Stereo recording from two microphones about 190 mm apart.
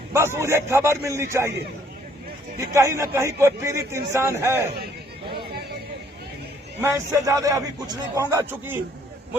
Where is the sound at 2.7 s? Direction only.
15° right (ahead or behind).